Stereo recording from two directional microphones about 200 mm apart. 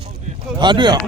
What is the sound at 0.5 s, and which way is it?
Speech, 20° right (ahead or behind).